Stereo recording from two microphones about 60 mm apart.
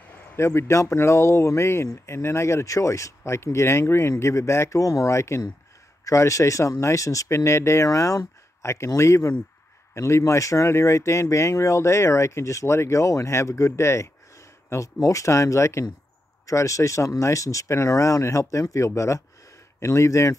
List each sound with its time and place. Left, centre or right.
0.1 s a sound: left
0.4 s speech: left
4.7 s speech: left
8.7 s speech: left